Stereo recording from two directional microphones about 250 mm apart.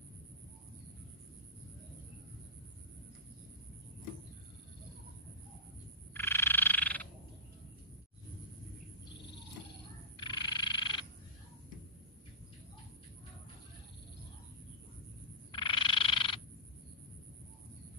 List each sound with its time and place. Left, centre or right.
6.1 s frog: centre
10.1 s frog: centre
15.5 s frog: centre